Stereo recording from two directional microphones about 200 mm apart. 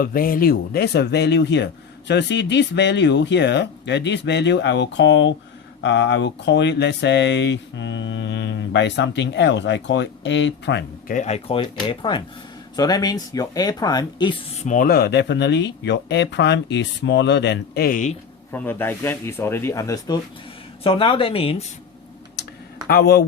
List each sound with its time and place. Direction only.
0.0 s speech: 45° left (ahead or behind)
11.1 s speech: 35° left (ahead or behind)
14.6 s speech: 40° left (ahead or behind)
18.5 s speech: 10° left (ahead or behind)
20.8 s speech: 30° left (ahead or behind)
22.9 s speech: 55° left (ahead or behind)